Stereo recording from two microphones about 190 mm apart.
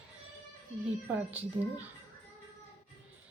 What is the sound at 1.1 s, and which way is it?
Speech, 10° right (ahead or behind).